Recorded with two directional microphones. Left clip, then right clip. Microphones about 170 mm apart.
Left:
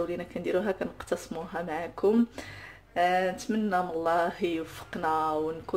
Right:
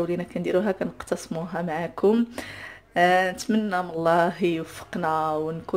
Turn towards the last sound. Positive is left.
turn(degrees=-30)  # may be behind; listen again after turning